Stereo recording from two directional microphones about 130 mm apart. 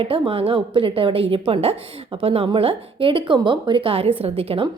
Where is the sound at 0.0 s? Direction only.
45° right (ahead or behind).